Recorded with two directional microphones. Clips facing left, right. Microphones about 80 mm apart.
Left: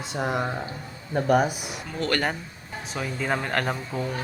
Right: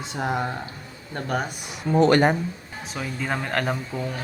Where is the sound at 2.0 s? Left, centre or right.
Right.